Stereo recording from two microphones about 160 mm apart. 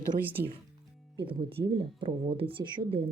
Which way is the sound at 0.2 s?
10° right (ahead or behind).